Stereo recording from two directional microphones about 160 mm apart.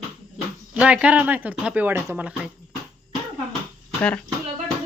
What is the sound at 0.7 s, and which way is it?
Speech, 10° right (ahead or behind).